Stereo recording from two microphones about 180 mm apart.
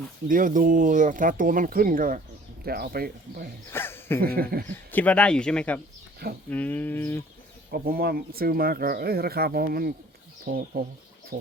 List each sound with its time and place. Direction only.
0.3 s speech: 50° right (ahead or behind)
3.7 s speech: 10° left (ahead or behind)
4.2 s speech: 55° right (ahead or behind)
4.7 s speech: 10° left (ahead or behind)
7.7 s speech: 55° right (ahead or behind)